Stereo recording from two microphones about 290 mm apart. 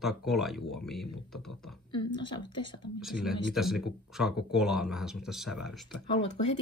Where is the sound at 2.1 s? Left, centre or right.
Centre.